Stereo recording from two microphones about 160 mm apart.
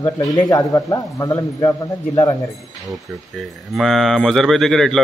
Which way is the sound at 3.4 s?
Centre (ahead or behind).